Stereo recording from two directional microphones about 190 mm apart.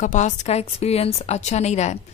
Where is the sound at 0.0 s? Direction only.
40° left (ahead or behind).